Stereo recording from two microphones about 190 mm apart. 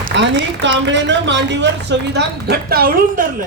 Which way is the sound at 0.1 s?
70° right (ahead or behind).